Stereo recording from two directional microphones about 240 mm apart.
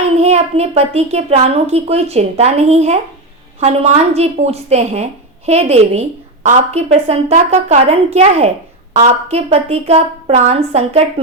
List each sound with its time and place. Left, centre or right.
0.2 s a woman's voice: right